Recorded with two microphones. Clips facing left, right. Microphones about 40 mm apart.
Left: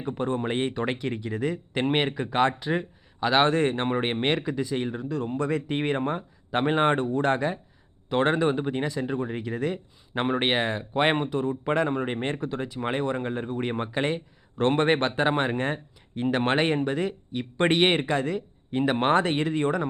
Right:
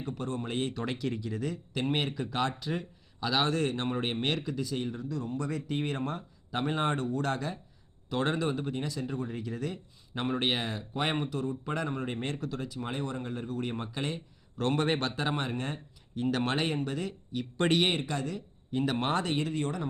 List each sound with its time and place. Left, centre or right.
0.0 s speech: left